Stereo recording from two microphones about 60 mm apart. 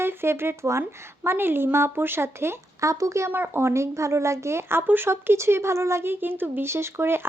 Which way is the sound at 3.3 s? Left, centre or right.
Right.